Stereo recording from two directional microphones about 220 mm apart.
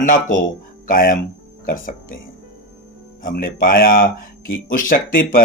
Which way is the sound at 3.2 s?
40° left (ahead or behind).